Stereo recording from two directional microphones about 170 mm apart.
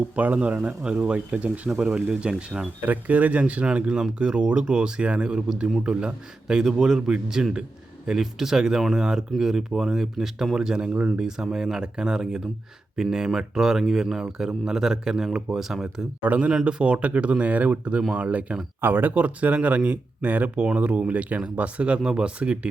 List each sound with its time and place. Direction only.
0.2 s speech: 10° right (ahead or behind)